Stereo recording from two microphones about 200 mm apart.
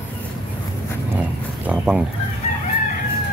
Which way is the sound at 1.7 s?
5° right (ahead or behind).